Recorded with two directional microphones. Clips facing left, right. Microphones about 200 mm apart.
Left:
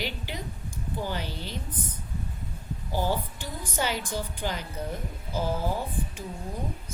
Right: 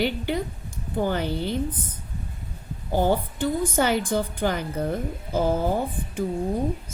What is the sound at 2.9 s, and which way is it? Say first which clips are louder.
A woman's voice: right 7 dB; 55° right (ahead or behind).